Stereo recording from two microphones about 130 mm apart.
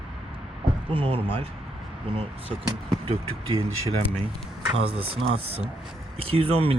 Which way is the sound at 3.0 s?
45° right (ahead or behind).